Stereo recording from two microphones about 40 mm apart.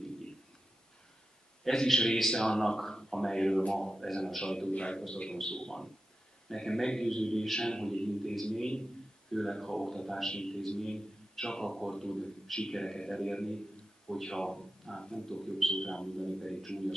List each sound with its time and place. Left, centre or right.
1.6 s a man's voice: centre
9.3 s speech: centre